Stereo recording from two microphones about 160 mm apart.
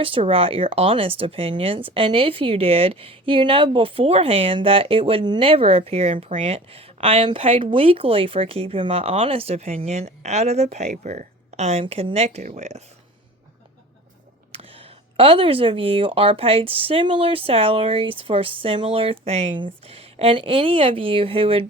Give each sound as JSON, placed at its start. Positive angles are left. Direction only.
{"t": 0.0, "sound": "speech", "side_deg": -35}
{"t": 14.5, "sound": "speech", "side_deg": -35}